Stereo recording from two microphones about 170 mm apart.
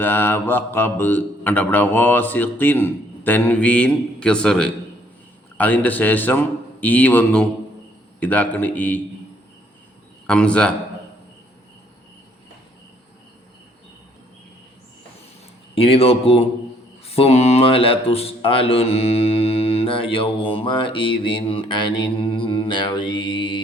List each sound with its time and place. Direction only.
0.0 s speech: 10° left (ahead or behind)
10.2 s a man's voice: 5° left (ahead or behind)
15.7 s speech: 35° left (ahead or behind)